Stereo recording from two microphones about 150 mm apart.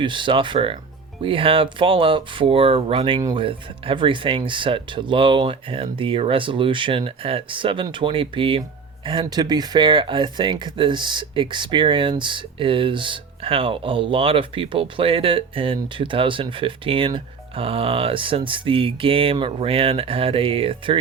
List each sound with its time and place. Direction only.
0.0 s speech: 30° right (ahead or behind)